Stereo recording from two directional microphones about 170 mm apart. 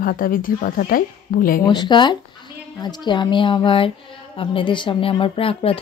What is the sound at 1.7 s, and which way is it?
Speech, 25° left (ahead or behind).